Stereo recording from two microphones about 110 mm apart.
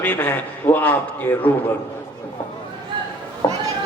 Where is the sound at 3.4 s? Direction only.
35° left (ahead or behind).